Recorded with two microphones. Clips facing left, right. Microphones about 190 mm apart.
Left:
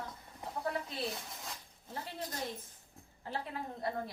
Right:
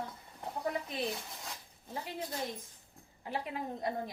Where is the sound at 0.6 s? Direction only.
15° right (ahead or behind).